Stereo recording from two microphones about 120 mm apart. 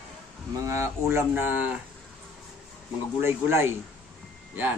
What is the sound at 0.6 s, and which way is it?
Speech, 25° right (ahead or behind).